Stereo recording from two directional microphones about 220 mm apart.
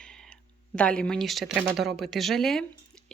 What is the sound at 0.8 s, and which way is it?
Speech, 5° left (ahead or behind).